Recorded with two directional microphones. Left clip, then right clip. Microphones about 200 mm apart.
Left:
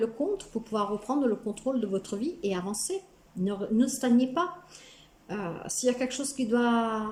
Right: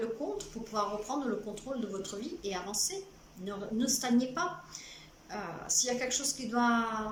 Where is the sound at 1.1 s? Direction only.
45° left (ahead or behind).